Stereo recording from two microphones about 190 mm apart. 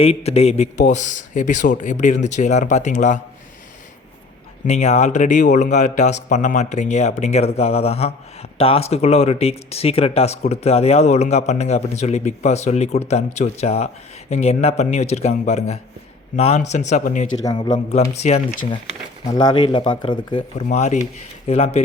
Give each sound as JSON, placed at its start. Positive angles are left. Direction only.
{"t": 0.0, "sound": "speech", "side_deg": 30}
{"t": 4.6, "sound": "speech", "side_deg": 35}
{"t": 17.4, "sound": "speech", "side_deg": 20}
{"t": 19.3, "sound": "speech", "side_deg": 20}
{"t": 20.7, "sound": "speech", "side_deg": 35}